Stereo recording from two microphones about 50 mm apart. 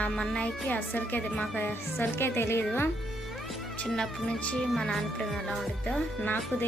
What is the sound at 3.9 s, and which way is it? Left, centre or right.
Speech, centre.